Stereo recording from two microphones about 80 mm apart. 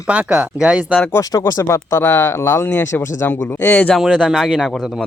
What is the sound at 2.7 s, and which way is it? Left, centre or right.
Speech, left.